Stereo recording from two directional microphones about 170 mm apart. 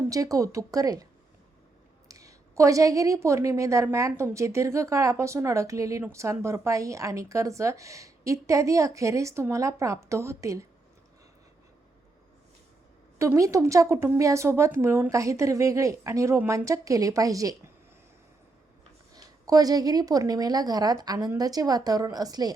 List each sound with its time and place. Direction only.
0.1 s a woman's voice: 20° right (ahead or behind)
2.0 s a woman's voice: 20° right (ahead or behind)
13.1 s a woman's voice: 15° right (ahead or behind)
19.1 s a woman's voice: 20° right (ahead or behind)